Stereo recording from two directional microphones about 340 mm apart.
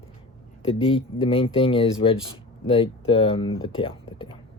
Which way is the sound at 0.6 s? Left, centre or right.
Centre.